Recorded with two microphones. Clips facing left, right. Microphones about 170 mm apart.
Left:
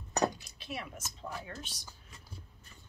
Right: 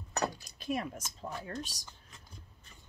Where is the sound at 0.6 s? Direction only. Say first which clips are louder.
Right 11 dB; 45° right (ahead or behind).